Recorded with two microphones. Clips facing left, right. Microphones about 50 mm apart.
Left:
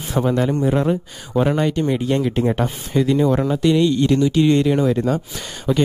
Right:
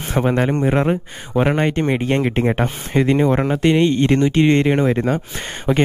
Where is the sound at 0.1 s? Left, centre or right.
Right.